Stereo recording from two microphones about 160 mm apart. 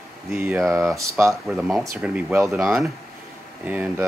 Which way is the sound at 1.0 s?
20° right (ahead or behind).